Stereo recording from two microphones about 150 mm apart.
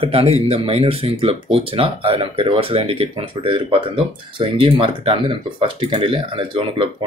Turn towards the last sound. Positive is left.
turn(degrees=-35)  # may be behind; listen again after turning